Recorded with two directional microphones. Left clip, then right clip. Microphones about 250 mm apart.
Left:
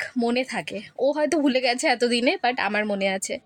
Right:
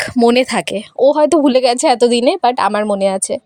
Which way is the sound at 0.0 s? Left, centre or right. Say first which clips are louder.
Right 13 dB; right.